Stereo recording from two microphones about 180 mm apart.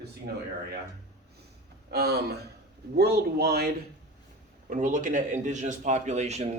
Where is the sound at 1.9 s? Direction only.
65° right (ahead or behind).